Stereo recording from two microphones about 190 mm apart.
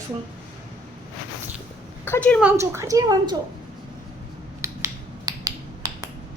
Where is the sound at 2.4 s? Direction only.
10° right (ahead or behind).